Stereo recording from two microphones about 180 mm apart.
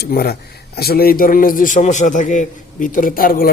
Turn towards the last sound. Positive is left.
turn(degrees=55)  # may be behind; listen again after turning